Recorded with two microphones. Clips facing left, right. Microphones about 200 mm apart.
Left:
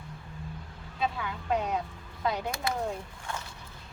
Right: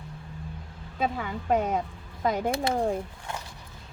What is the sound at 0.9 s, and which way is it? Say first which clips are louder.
A woman's voice: right 3 dB; 45° right (ahead or behind).